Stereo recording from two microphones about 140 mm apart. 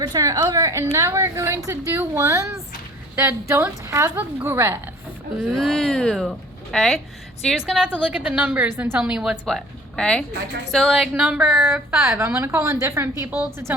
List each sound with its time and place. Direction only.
0.0 s a woman's voice: 25° right (ahead or behind)
5.5 s a woman's voice: centre (ahead or behind)
11.1 s a woman's voice: 10° right (ahead or behind)